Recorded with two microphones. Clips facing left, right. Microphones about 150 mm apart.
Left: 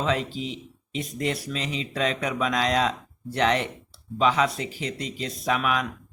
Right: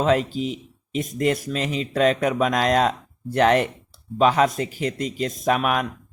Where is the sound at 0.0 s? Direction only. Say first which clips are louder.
Right 6 dB; 45° right (ahead or behind).